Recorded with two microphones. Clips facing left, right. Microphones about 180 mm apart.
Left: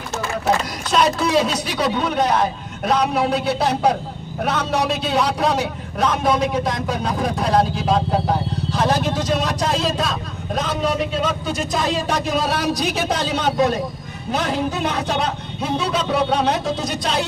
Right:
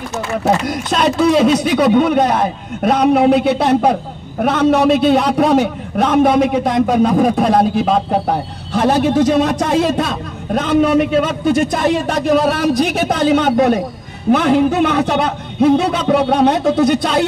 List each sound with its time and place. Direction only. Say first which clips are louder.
0.7 s a man's voice: right 3 dB; 50° right (ahead or behind)